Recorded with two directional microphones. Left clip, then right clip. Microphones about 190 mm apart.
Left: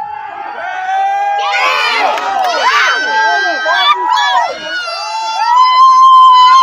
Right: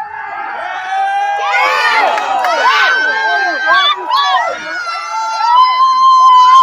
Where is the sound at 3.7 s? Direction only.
55° left (ahead or behind).